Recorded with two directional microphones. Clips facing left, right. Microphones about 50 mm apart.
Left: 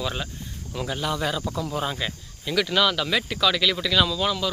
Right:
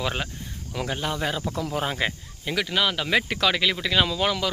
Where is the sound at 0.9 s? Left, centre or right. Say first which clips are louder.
Left 1 dB; right.